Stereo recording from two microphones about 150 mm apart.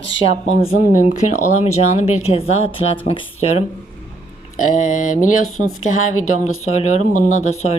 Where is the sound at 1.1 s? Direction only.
50° left (ahead or behind).